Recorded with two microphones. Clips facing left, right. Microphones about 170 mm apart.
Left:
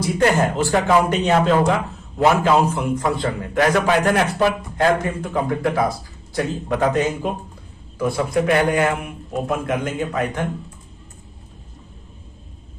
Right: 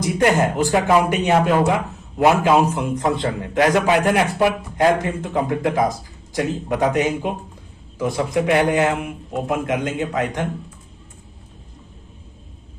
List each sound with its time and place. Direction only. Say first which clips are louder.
0.0 s a man's voice: even; 15° right (ahead or behind)